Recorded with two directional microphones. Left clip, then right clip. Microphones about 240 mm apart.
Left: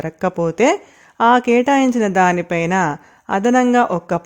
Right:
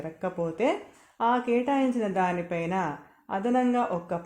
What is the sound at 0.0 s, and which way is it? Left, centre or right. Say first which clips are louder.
Speech: left 12 dB; left.